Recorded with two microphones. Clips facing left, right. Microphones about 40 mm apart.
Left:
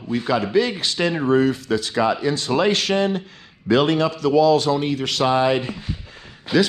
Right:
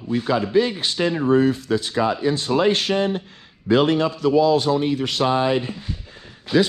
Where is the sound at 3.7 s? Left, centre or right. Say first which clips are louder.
Even; left.